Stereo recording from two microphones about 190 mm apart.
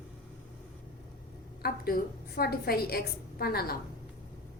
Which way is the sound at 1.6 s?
50° left (ahead or behind).